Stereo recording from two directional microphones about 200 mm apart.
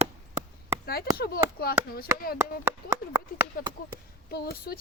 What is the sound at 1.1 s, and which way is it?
Speech, 50° left (ahead or behind).